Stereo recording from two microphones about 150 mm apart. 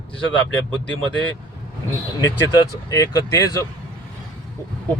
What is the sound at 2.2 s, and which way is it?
Speech, 20° left (ahead or behind).